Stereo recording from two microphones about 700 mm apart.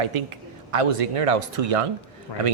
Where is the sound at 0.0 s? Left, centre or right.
Right.